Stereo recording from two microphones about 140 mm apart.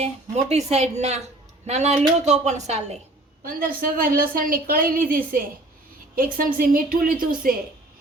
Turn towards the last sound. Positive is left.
turn(degrees=-90)